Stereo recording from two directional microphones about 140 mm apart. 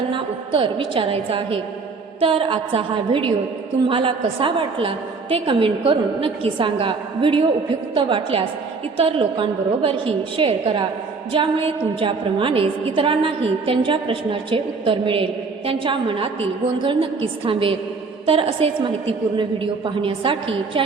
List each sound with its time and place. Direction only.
0.1 s a woman's voice: 35° right (ahead or behind)